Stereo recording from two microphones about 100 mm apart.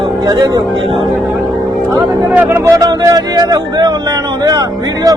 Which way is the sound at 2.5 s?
30° right (ahead or behind).